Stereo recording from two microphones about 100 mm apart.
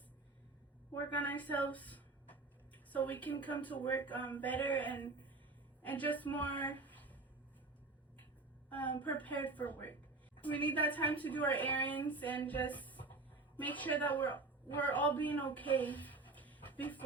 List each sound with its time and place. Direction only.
0.9 s a woman's voice: 15° left (ahead or behind)
8.7 s a woman's voice: 15° left (ahead or behind)